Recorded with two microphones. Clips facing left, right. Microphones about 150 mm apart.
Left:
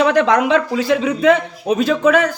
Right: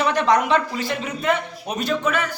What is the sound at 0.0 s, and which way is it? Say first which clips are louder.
A man's voice: left 5 dB; 90° left.